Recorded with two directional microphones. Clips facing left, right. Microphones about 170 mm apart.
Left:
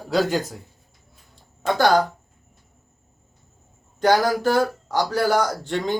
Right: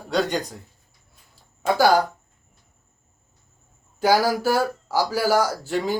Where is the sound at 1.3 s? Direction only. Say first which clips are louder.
Right 1 dB; 5° right (ahead or behind).